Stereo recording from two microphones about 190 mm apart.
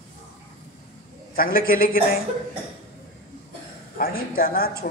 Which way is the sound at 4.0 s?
50° left (ahead or behind).